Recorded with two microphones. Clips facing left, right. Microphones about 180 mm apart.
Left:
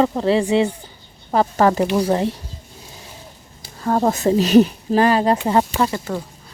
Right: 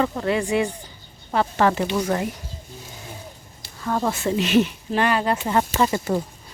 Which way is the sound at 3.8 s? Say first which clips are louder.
Left 6 dB; 40° left (ahead or behind).